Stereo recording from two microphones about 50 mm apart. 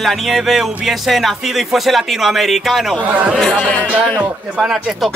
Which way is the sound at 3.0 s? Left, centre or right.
Right.